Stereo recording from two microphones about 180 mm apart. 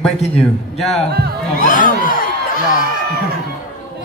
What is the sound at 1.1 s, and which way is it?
Speech, 65° right (ahead or behind).